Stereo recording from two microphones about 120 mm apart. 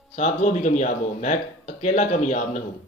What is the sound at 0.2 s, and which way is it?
A man's voice, 90° left.